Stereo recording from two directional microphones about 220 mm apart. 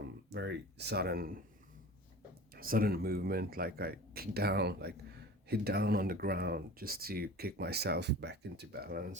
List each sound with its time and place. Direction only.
0.3 s speech: 50° right (ahead or behind)
2.6 s speech: 40° right (ahead or behind)